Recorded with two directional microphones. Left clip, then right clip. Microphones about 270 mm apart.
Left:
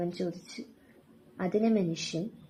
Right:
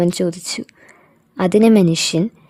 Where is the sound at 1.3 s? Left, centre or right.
Right.